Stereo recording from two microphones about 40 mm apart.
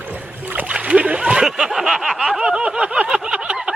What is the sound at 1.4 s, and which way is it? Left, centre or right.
Speech, centre.